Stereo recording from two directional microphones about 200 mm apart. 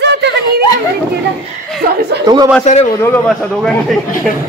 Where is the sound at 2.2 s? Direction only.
20° right (ahead or behind).